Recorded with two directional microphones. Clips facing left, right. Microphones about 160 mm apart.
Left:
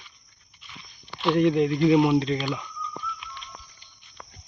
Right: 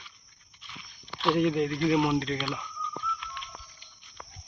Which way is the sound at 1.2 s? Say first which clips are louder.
Left 4 dB; centre (ahead or behind).